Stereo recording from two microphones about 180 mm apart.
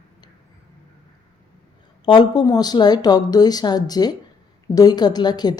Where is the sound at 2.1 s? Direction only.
25° left (ahead or behind).